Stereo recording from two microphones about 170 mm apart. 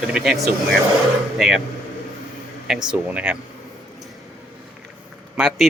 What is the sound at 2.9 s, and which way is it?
Speech, 10° right (ahead or behind).